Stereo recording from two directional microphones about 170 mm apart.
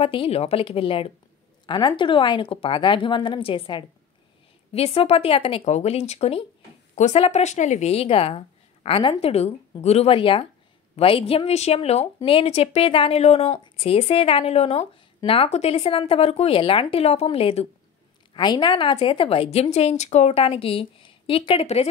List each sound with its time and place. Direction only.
0.0 s a woman's voice: 35° left (ahead or behind)